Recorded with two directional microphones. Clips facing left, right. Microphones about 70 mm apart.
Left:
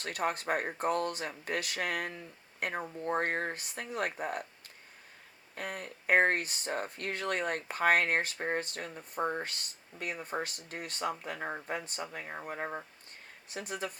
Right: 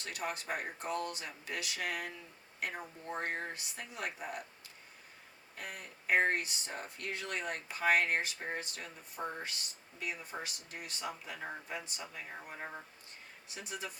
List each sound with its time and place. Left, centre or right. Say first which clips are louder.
0.0 s speech: left 7 dB; left
5.5 s speech: left 6 dB; left